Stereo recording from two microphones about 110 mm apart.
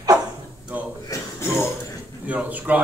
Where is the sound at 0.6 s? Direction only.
15° right (ahead or behind).